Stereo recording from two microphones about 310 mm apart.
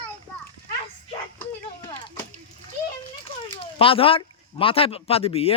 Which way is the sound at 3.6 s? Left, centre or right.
Centre.